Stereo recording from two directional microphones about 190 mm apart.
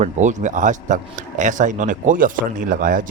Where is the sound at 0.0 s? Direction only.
40° right (ahead or behind).